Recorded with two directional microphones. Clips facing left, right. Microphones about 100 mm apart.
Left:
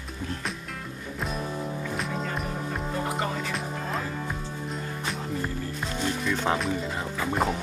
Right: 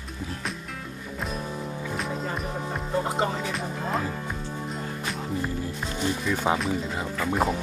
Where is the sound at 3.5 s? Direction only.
Centre (ahead or behind).